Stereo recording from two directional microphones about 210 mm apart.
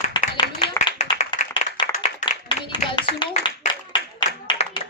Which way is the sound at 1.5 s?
20° left (ahead or behind).